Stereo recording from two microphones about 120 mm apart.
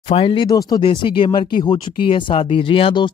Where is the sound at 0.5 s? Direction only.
30° left (ahead or behind).